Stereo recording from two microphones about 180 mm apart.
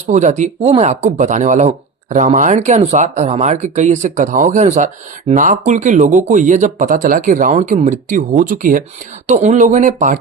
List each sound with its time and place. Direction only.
0.1 s speech: 40° right (ahead or behind)